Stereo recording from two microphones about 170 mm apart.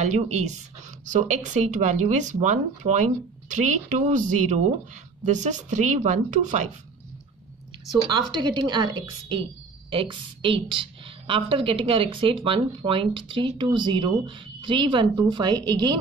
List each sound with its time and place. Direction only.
0.0 s speech: 45° right (ahead or behind)
8.1 s a woman's voice: 25° right (ahead or behind)